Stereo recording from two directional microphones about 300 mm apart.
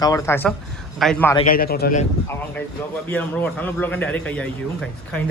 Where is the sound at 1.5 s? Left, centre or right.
Left.